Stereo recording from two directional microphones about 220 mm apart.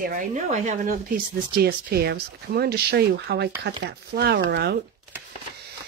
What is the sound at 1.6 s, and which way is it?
Speech, 45° right (ahead or behind).